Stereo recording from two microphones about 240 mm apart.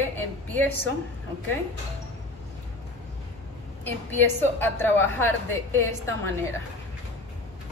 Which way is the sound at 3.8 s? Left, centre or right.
Centre.